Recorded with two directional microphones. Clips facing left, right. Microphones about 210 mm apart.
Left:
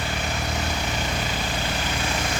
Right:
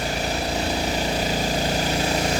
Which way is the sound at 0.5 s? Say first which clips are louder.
Right 4 dB; 35° right (ahead or behind).